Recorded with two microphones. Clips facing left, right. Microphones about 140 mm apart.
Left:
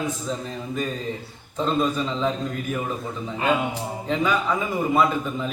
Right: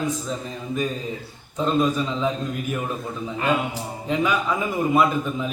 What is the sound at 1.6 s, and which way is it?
Speech, 5° right (ahead or behind).